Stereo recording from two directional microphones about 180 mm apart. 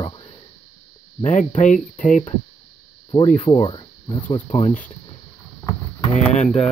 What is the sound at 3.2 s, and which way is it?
Speech, 40° left (ahead or behind).